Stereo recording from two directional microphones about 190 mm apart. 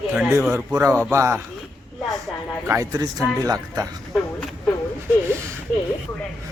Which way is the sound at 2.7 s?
20° right (ahead or behind).